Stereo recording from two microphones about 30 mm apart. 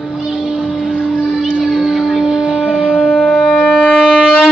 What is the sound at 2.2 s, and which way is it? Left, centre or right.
Shofar, right.